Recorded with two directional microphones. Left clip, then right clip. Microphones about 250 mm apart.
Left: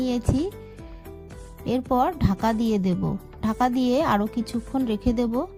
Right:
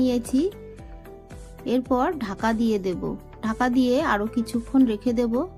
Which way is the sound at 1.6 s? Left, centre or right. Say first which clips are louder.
Even; left.